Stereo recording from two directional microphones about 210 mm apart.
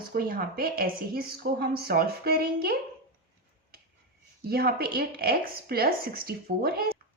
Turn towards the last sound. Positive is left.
turn(degrees=-45)  # may be behind; listen again after turning